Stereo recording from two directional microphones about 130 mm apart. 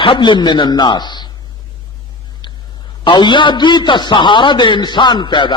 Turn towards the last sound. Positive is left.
turn(degrees=35)  # may be behind; listen again after turning